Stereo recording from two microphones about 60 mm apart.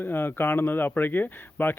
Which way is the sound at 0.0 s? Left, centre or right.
Left.